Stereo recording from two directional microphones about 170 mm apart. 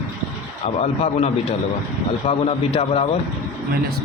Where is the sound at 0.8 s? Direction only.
40° left (ahead or behind).